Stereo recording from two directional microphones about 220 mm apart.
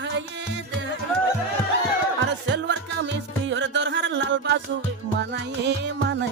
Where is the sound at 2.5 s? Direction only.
55° right (ahead or behind).